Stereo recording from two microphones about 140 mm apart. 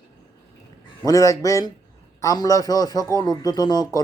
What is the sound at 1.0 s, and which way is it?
Speech, 25° left (ahead or behind).